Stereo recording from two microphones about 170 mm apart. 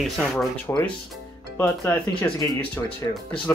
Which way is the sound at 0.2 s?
5° left (ahead or behind).